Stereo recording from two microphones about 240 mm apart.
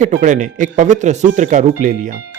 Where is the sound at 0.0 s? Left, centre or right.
Right.